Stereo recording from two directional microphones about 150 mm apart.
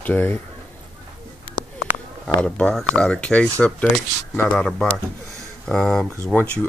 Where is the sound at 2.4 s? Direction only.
5° left (ahead or behind).